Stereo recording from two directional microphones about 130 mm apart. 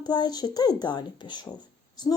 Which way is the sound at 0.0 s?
35° left (ahead or behind).